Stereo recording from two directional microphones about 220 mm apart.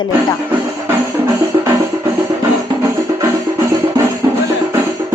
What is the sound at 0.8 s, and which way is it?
Music, 10° right (ahead or behind).